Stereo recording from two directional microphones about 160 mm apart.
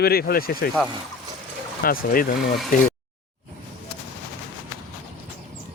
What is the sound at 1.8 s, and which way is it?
Speech, 65° left (ahead or behind).